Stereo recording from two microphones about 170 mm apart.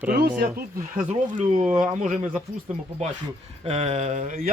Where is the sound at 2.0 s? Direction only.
45° right (ahead or behind).